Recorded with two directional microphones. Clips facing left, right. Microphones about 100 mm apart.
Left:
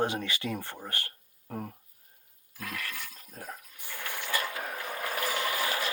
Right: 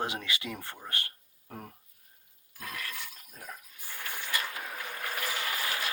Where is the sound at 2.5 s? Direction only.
25° right (ahead or behind).